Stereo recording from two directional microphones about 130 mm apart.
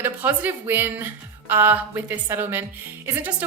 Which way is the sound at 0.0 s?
15° right (ahead or behind).